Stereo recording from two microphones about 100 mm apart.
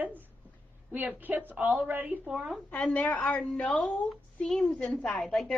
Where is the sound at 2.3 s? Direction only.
5° right (ahead or behind).